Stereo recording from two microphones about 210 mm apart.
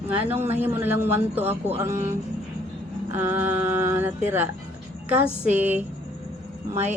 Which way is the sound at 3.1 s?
10° right (ahead or behind).